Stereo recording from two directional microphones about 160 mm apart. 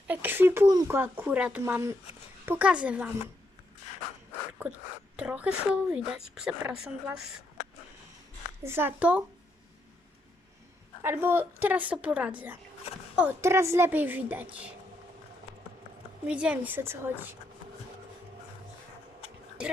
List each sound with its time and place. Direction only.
0.1 s a woman's voice: 10° right (ahead or behind)
5.1 s speech: 10° right (ahead or behind)
8.6 s a woman's voice: 15° right (ahead or behind)
11.0 s a woman's voice: 15° right (ahead or behind)
16.2 s a woman's voice: 5° right (ahead or behind)